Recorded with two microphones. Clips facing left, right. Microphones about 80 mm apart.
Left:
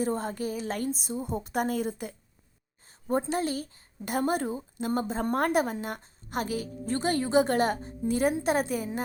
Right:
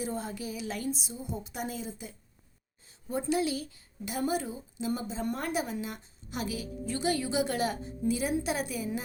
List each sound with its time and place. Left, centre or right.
0.0 s a woman's voice: left